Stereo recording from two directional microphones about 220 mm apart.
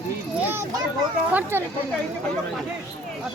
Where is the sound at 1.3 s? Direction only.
10° right (ahead or behind).